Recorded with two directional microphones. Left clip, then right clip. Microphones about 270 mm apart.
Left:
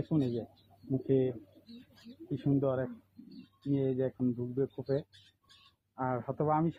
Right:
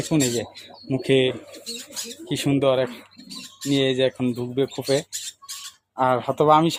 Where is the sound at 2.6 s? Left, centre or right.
Centre.